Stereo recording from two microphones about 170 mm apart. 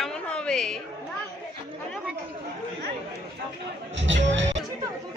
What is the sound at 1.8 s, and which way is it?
Speech, centre (ahead or behind).